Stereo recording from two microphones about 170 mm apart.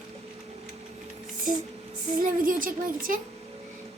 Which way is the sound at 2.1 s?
55° right (ahead or behind).